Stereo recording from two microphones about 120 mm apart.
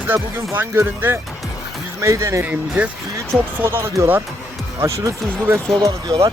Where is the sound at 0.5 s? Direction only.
20° right (ahead or behind).